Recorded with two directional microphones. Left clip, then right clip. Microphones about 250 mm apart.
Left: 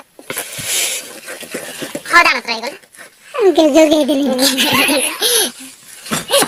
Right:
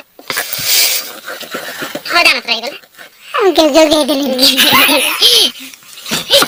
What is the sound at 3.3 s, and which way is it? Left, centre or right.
Speech, right.